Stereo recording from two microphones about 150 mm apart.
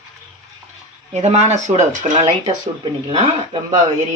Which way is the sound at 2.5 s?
35° right (ahead or behind).